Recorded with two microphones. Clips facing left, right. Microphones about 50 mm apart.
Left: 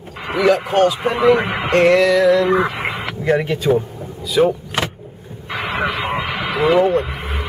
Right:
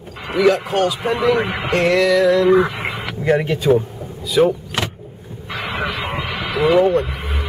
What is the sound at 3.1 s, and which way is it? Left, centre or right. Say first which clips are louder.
Speech: right 1 dB; centre.